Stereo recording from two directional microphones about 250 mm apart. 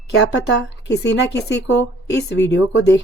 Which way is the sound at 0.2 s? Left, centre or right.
Left.